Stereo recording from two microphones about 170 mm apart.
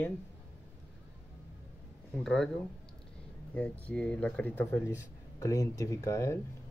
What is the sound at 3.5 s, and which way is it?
Speech, 5° left (ahead or behind).